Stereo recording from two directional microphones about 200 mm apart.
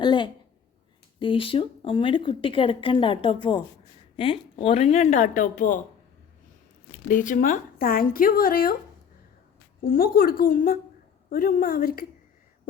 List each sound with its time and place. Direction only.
0.0 s a sound: 25° left (ahead or behind)
1.2 s a woman's voice: 25° left (ahead or behind); by 5.8 s 40° left (ahead or behind)
7.1 s speech: 40° left (ahead or behind)
9.8 s speech: 45° left (ahead or behind)